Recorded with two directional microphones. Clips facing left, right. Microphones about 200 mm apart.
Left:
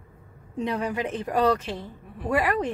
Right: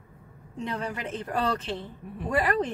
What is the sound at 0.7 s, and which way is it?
Speech, 15° left (ahead or behind).